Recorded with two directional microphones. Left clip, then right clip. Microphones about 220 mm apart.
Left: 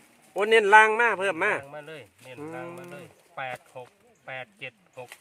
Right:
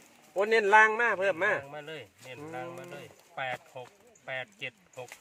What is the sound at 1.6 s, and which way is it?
Speech, 15° left (ahead or behind).